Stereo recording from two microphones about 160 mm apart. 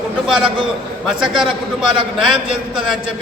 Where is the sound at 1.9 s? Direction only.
30° right (ahead or behind).